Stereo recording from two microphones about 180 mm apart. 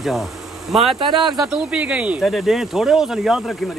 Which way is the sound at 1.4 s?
5° right (ahead or behind).